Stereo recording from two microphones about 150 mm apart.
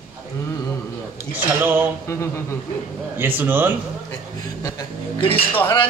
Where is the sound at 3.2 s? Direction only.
15° right (ahead or behind).